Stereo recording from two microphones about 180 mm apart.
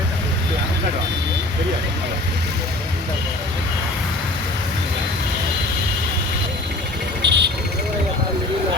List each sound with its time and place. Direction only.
7.2 s insect: 70° right (ahead or behind)